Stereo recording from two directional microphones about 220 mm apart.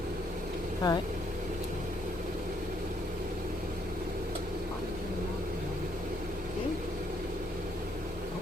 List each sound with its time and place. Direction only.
0.8 s speech: 20° left (ahead or behind)